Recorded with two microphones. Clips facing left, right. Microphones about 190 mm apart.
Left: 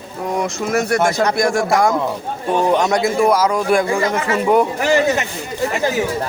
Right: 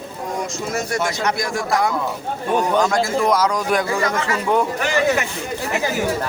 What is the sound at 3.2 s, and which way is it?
Speech, 10° left (ahead or behind).